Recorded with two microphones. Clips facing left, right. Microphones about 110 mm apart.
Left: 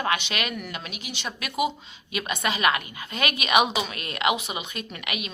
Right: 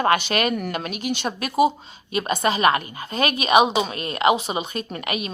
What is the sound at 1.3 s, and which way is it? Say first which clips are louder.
A woman's voice: right 7 dB; 35° right (ahead or behind).